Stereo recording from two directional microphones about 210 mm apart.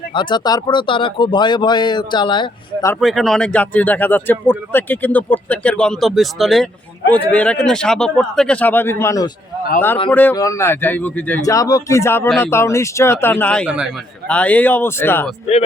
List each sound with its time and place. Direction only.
0.1 s speech: 20° left (ahead or behind)
2.9 s speech: centre (ahead or behind)